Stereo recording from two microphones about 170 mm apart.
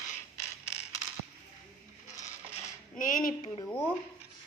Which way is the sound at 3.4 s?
30° left (ahead or behind).